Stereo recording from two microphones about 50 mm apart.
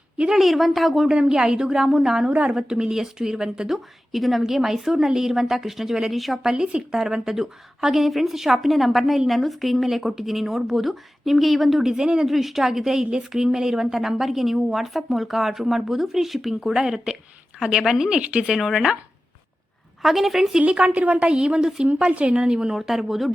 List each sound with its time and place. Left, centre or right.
0.3 s a woman's voice: centre
1.1 s speech: centre
2.2 s a woman's voice: right; by 6.5 s centre
6.5 s a woman's voice: centre
18.2 s a woman's voice: right
18.4 s a woman's voice: centre
20.0 s a woman's voice: centre
20.6 s a woman's voice: right